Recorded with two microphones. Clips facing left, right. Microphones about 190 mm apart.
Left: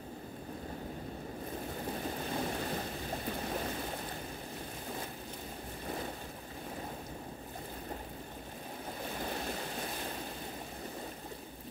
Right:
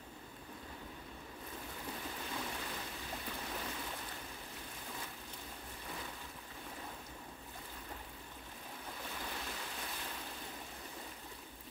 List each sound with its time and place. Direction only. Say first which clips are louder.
1.8 s a sound: left 7 dB; 45° left (ahead or behind)
5.9 s waves: left 8 dB; 45° left (ahead or behind)
9.0 s waves: left 8 dB; 40° left (ahead or behind)